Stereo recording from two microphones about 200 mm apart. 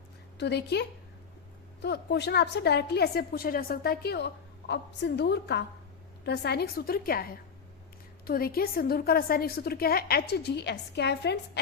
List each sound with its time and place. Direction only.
0.3 s a woman's voice: 55° left (ahead or behind)